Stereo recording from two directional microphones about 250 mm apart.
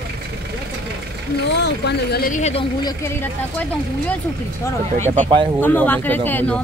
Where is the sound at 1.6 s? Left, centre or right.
Left.